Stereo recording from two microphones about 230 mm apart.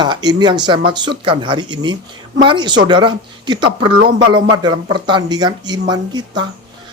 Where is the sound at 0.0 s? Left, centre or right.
Centre.